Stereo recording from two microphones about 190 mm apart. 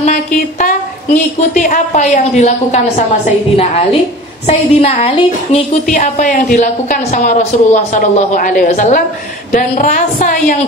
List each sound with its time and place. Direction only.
0.0 s a woman's voice: 45° left (ahead or behind)
4.5 s a woman's voice: 35° left (ahead or behind)